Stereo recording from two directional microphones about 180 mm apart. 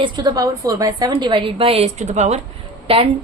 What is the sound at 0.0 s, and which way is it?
A woman's voice, 25° right (ahead or behind).